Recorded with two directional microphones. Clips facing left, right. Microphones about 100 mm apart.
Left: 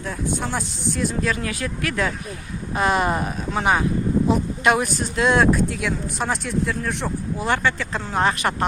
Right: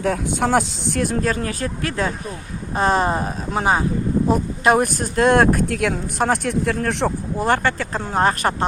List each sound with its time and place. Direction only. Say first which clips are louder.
0.0 s speech: right 6 dB; 85° right; by 1.2 s 65° right (ahead or behind)
1.2 s speech: right 2 dB; 40° right (ahead or behind)
4.3 s speech: right 4 dB; 40° right (ahead or behind); by 7.1 s 70° right (ahead or behind)
7.3 s speech: right 2 dB; 45° right (ahead or behind)